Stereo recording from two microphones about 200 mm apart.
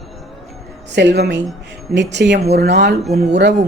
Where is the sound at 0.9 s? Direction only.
55° right (ahead or behind).